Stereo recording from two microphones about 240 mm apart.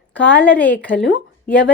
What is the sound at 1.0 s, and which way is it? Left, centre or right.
Speech, left.